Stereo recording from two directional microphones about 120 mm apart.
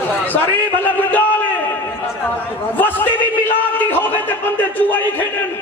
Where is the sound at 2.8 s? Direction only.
15° left (ahead or behind).